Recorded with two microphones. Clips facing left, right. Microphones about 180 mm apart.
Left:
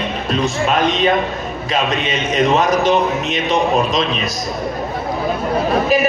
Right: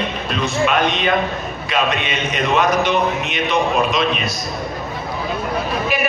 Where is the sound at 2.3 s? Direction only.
40° left (ahead or behind).